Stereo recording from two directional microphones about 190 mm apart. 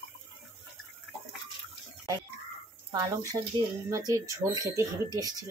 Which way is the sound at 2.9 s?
20° right (ahead or behind).